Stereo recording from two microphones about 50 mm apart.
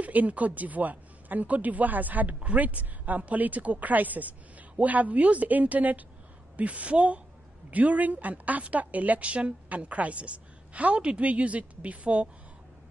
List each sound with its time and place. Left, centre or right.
0.0 s a woman's voice: right